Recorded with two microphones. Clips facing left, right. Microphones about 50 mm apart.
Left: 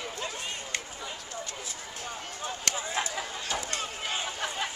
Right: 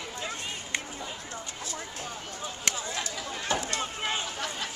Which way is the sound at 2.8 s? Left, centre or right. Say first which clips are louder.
Left 2 dB; centre.